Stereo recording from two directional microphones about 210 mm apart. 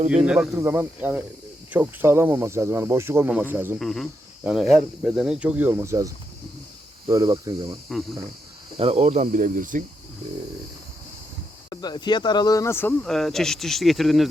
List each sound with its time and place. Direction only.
0.3 s speech: 5° right (ahead or behind)
3.8 s speech: centre (ahead or behind); by 7.8 s 15° right (ahead or behind)
7.9 s speech: centre (ahead or behind)
8.8 s speech: 30° right (ahead or behind)
11.7 s speech: 20° left (ahead or behind); by 14.3 s centre (ahead or behind)